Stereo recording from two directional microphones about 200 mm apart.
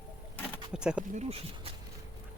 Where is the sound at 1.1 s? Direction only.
35° right (ahead or behind).